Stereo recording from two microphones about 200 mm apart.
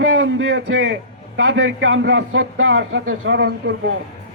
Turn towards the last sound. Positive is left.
turn(degrees=-55)  # may be behind; listen again after turning